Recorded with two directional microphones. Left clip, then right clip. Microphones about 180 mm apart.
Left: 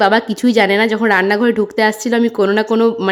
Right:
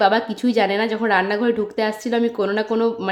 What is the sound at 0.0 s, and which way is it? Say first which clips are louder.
A woman's voice: left 4 dB; 35° left (ahead or behind).